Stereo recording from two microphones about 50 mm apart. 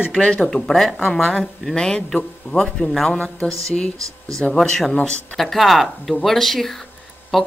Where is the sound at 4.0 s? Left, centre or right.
Right.